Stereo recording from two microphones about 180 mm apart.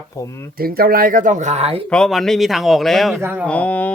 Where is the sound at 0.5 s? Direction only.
55° right (ahead or behind); by 1.9 s 35° right (ahead or behind).